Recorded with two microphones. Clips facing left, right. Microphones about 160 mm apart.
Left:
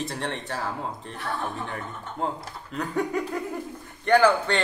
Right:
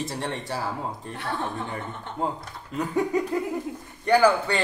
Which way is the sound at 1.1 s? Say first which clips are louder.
Right 1 dB; 30° right (ahead or behind).